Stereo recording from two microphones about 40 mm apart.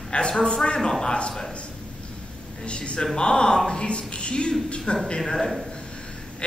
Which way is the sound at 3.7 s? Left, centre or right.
Left.